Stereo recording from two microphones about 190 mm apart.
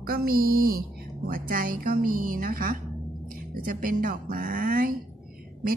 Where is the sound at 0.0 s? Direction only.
50° right (ahead or behind).